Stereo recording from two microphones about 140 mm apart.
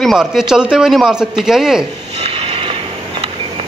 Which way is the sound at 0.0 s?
Centre (ahead or behind).